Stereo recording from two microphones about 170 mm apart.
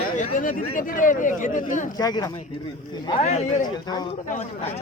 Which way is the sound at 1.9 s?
20° left (ahead or behind).